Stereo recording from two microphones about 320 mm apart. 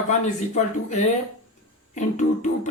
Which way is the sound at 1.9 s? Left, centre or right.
Left.